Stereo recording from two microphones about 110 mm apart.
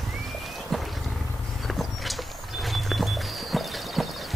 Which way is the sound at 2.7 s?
Centre (ahead or behind).